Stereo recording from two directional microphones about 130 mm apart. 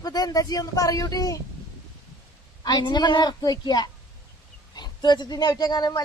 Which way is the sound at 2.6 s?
35° left (ahead or behind).